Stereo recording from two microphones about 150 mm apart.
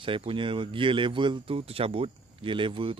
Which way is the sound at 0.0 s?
35° right (ahead or behind).